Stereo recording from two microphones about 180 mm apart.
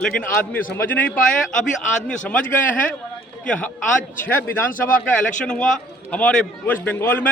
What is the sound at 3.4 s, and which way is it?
A man's voice, 5° left (ahead or behind).